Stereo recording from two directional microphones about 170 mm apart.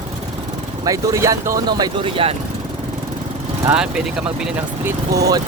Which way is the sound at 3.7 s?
5° right (ahead or behind).